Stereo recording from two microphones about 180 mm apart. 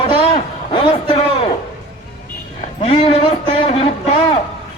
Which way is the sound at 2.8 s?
35° left (ahead or behind).